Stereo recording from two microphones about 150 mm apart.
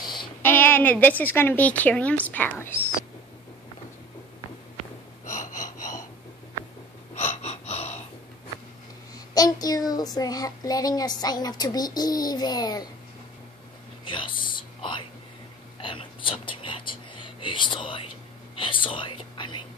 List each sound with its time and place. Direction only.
0.0 s a sound: 30° left (ahead or behind)
0.4 s a woman's voice: 10° left (ahead or behind)
5.2 s gasp: 60° left (ahead or behind)
7.2 s gasp: 45° left (ahead or behind)
9.3 s child singing: 25° left (ahead or behind)
14.0 s whispering: 35° left (ahead or behind)